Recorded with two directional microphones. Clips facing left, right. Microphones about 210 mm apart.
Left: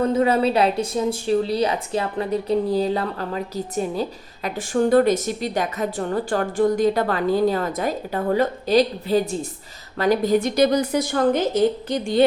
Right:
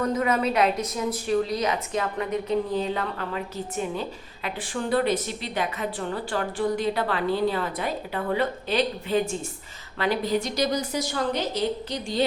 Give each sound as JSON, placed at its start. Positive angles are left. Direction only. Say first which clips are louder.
{"t": 0.0, "sound": "a woman's voice", "louder": "left 5 dB", "side_deg": 30}